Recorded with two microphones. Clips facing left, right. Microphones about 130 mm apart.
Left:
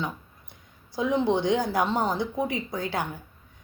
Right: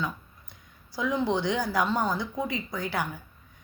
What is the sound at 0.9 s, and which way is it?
A woman's voice, 25° left (ahead or behind).